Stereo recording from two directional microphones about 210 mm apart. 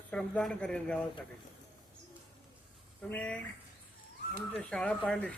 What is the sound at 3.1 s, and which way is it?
Speech, 5° left (ahead or behind).